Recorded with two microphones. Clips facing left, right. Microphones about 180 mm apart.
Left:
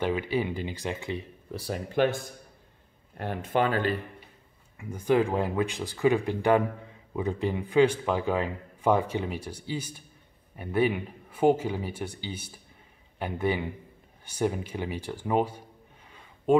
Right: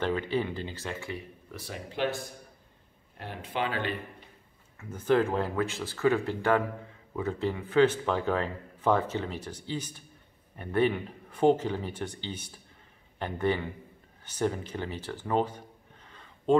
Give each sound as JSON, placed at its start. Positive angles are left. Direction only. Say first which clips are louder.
{"t": 0.0, "sound": "speech", "louder": "left 1 dB", "side_deg": 10}
{"t": 1.5, "sound": "speech", "louder": "left 8 dB", "side_deg": 35}
{"t": 1.9, "sound": "speech", "louder": "left 6 dB", "side_deg": 50}
{"t": 3.2, "sound": "speech", "louder": "left 6 dB", "side_deg": 50}
{"t": 4.7, "sound": "speech", "louder": "left 1 dB", "side_deg": 15}
{"t": 16.1, "sound": "a sound", "louder": "left 1 dB", "side_deg": 10}